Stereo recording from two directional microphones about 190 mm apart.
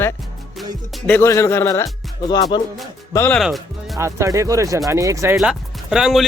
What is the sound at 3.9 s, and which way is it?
Speech, 15° right (ahead or behind).